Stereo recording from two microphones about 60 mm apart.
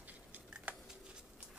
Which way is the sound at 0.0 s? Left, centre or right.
Right.